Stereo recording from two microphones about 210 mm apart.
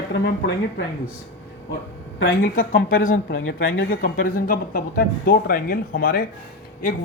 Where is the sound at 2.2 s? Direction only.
45° left (ahead or behind).